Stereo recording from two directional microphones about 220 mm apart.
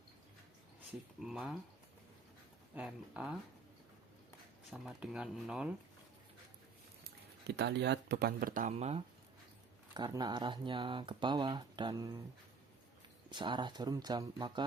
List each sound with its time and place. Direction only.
1.2 s speech: centre (ahead or behind)
2.7 s speech: 5° right (ahead or behind)
4.7 s speech: 5° right (ahead or behind)
7.4 s speech: 50° right (ahead or behind); by 9.0 s 30° right (ahead or behind)
9.9 s speech: 20° right (ahead or behind)
13.3 s speech: 20° right (ahead or behind)